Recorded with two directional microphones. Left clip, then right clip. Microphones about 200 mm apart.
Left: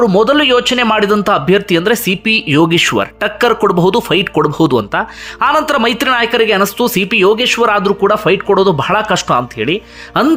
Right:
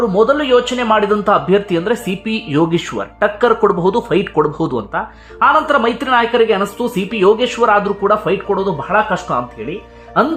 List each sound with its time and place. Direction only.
0.0 s speech: 25° left (ahead or behind)